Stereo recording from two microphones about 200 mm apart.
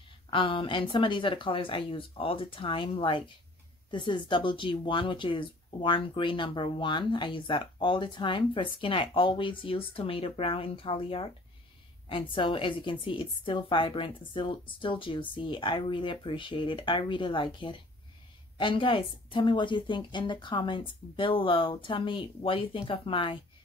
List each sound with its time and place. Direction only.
0.3 s speech: 25° left (ahead or behind)